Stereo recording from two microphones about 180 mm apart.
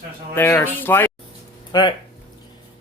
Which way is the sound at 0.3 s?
10° left (ahead or behind).